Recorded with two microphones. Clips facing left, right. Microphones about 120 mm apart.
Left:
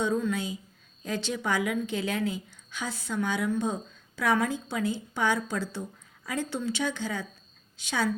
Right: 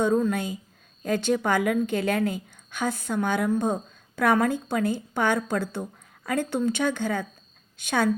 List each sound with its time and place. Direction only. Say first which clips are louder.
0.0 s a woman's voice: right 5 dB; 50° right (ahead or behind)